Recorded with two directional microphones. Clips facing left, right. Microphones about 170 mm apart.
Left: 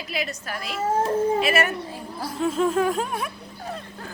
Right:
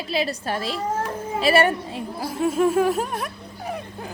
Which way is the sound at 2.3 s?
10° right (ahead or behind).